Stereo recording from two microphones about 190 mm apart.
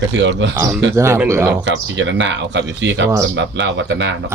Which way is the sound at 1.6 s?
70° right (ahead or behind).